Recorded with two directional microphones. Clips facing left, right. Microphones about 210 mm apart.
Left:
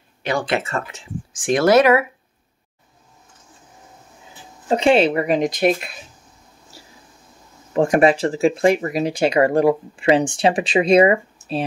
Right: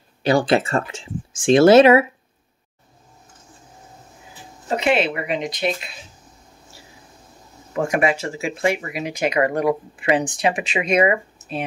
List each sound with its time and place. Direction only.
0.2 s speech: 35° right (ahead or behind)
4.6 s speech: 30° left (ahead or behind); by 5.9 s 55° left (ahead or behind)
7.7 s speech: 35° left (ahead or behind)